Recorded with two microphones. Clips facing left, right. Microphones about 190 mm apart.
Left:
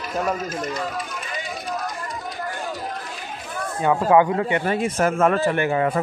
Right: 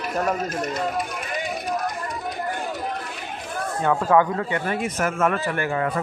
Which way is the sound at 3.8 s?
15° left (ahead or behind).